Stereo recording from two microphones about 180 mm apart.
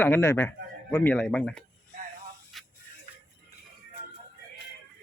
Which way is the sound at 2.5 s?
Centre (ahead or behind).